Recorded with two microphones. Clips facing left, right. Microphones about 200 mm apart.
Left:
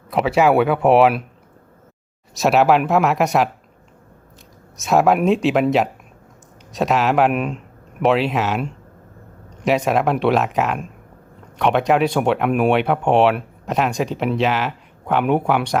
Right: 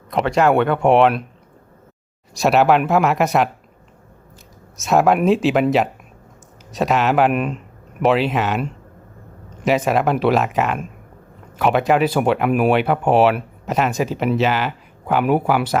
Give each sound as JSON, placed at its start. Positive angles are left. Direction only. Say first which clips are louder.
{"t": 0.1, "sound": "speech", "louder": "left 1 dB", "side_deg": 5}
{"t": 2.3, "sound": "speech", "louder": "even", "side_deg": 0}
{"t": 4.8, "sound": "speech", "louder": "even", "side_deg": 0}